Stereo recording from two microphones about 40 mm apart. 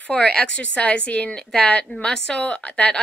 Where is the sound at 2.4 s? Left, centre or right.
Left.